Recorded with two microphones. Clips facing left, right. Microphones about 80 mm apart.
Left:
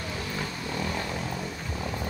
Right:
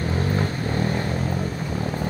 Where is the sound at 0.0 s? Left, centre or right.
Right.